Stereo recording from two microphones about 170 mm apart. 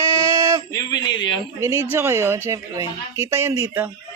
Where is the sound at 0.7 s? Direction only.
20° left (ahead or behind).